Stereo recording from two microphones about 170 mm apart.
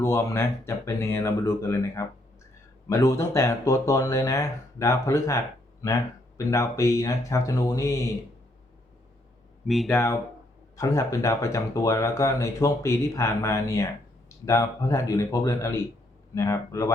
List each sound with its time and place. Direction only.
0.0 s speech: 15° left (ahead or behind)
9.6 s speech: centre (ahead or behind)
9.9 s speech: 15° left (ahead or behind)